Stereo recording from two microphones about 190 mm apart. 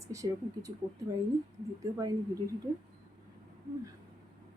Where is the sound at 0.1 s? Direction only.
15° right (ahead or behind).